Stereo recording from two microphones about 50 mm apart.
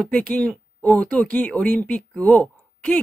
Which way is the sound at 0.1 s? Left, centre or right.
Left.